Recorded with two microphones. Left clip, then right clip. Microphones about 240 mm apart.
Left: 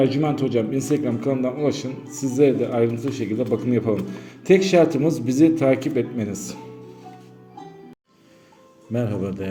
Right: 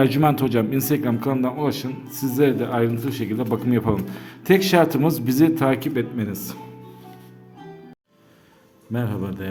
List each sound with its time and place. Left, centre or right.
0.0 s speech: right; by 6.6 s centre
8.9 s a man's voice: centre